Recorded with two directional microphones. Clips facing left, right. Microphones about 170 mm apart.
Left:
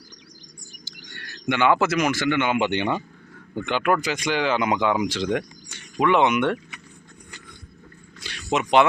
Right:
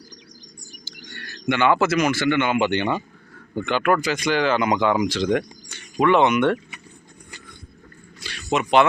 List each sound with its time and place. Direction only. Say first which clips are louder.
0.9 s speech: right 3 dB; 15° left (ahead or behind)
8.5 s speech: right 1 dB; 15° left (ahead or behind)